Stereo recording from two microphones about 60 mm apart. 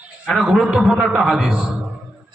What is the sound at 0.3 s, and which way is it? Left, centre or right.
A man's voice, centre.